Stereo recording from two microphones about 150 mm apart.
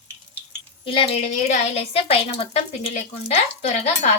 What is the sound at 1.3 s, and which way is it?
A woman's voice, 55° left (ahead or behind).